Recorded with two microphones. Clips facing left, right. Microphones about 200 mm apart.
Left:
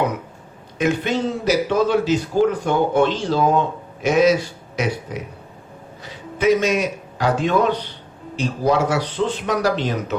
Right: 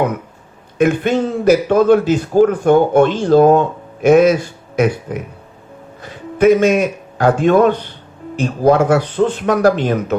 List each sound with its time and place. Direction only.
0.8 s a man's voice: 50° right (ahead or behind)